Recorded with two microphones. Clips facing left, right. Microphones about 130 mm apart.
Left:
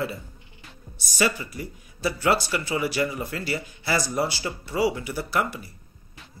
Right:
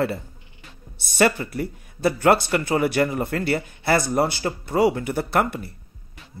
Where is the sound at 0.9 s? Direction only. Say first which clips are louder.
Right 5 dB; 60° right (ahead or behind).